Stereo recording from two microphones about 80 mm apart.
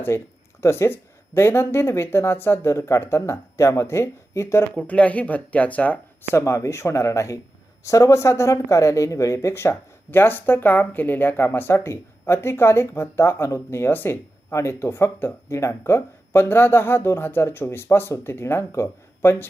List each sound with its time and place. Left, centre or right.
0.1 s speech: left
4.7 s speech: centre
6.3 s speech: left